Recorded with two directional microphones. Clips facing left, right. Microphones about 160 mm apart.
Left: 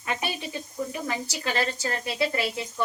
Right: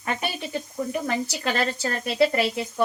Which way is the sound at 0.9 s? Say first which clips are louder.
Right 5 dB; 60° right (ahead or behind).